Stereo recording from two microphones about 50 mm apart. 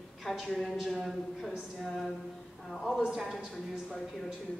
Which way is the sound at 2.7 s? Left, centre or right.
Centre.